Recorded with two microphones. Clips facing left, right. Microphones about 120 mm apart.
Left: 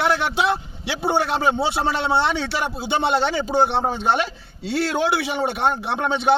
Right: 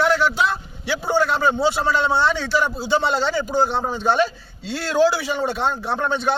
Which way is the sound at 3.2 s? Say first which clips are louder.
Even; 75° left (ahead or behind).